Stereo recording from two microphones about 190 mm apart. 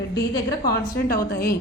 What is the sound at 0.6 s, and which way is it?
Speech, 50° left (ahead or behind).